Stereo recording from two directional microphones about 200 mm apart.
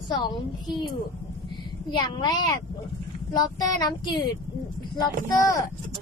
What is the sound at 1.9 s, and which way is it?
Speech, 20° left (ahead or behind).